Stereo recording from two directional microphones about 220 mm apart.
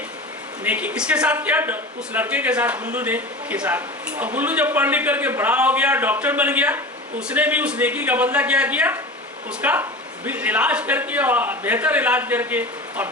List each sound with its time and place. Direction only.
0.6 s speech: 5° right (ahead or behind)